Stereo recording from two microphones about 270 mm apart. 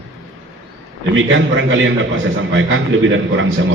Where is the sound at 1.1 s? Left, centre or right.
Right.